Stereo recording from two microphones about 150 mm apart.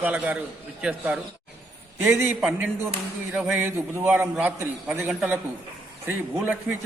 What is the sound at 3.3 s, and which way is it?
A man's voice, 5° right (ahead or behind).